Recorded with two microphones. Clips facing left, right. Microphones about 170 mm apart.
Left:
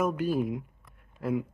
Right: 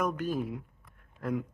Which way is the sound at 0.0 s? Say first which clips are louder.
Left 4 dB; 10° left (ahead or behind).